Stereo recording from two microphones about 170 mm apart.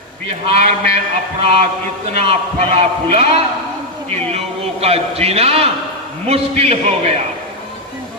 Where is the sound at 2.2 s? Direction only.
35° right (ahead or behind).